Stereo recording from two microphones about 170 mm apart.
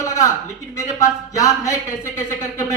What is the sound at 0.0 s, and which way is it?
A man's voice, 15° left (ahead or behind).